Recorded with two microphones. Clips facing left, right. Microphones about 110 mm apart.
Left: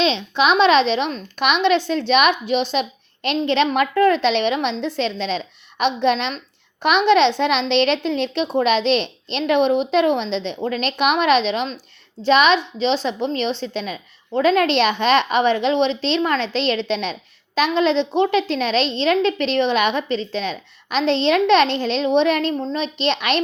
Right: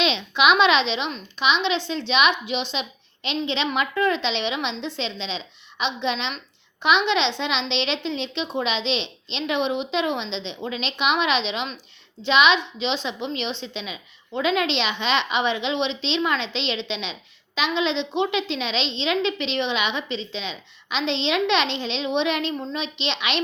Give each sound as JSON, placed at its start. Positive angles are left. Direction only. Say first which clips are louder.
{"t": 0.0, "sound": "a woman's voice", "louder": "left 2 dB", "side_deg": 35}